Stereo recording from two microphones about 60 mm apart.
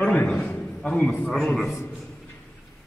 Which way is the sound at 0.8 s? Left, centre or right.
Centre.